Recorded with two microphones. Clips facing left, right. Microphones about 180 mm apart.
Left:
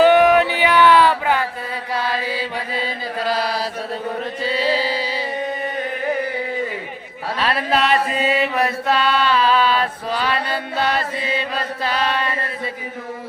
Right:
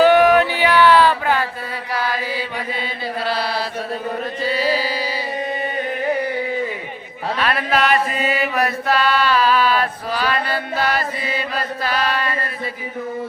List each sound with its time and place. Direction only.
0.0 s a sound: 20° left (ahead or behind)
1.9 s mantra: 25° left (ahead or behind)
3.2 s chant: 40° left (ahead or behind)
4.4 s carnatic music: 25° left (ahead or behind)
7.3 s chant: 30° left (ahead or behind)